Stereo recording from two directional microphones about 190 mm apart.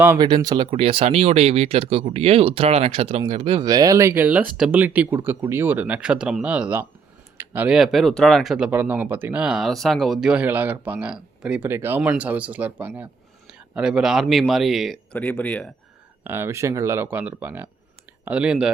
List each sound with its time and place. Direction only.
0.2 s speech: 20° right (ahead or behind); by 15.7 s 5° left (ahead or behind)
16.2 s speech: 10° right (ahead or behind)